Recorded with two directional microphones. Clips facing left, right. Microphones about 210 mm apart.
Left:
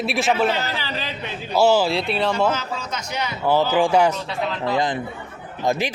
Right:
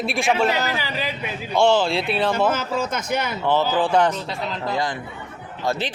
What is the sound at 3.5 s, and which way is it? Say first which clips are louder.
Speech: left 2 dB; 15° left (ahead or behind).